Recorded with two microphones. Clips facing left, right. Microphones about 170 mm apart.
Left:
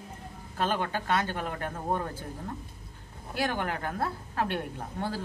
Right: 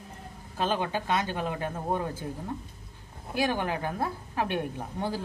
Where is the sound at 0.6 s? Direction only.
15° right (ahead or behind).